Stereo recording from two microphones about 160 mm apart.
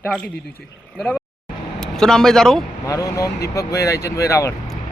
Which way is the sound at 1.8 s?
5° left (ahead or behind).